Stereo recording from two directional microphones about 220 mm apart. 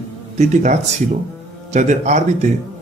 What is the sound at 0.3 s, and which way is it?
Speech, 30° right (ahead or behind).